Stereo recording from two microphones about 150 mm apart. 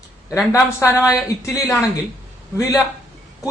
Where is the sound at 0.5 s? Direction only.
15° left (ahead or behind).